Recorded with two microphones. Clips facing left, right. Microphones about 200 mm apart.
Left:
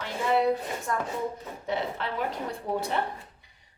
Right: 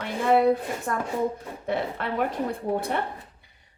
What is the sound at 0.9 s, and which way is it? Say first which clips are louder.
Speech: right 4 dB; 55° right (ahead or behind).